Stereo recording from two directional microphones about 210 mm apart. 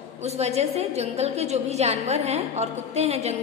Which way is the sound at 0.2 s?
30° right (ahead or behind).